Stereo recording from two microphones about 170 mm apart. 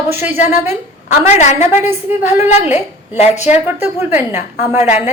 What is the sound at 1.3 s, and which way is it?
Speech, 40° left (ahead or behind).